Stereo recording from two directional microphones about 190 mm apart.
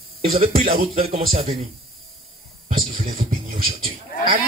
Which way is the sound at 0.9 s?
30° right (ahead or behind).